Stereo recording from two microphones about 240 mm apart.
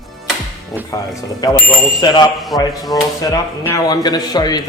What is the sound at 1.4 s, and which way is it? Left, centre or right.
A man's voice, centre.